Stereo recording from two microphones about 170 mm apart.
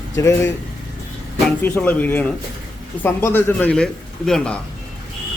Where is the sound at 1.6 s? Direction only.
10° left (ahead or behind).